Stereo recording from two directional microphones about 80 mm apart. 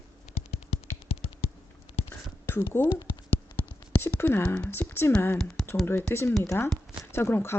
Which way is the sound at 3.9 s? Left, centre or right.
Centre.